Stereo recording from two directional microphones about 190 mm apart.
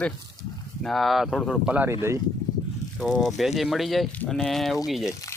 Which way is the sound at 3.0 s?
Centre (ahead or behind).